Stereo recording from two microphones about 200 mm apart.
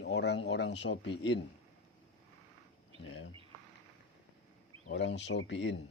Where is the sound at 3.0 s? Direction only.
65° left (ahead or behind).